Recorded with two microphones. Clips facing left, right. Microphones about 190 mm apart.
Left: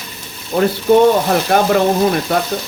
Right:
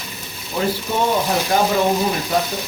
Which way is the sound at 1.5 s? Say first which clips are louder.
Left 3 dB; 65° left (ahead or behind).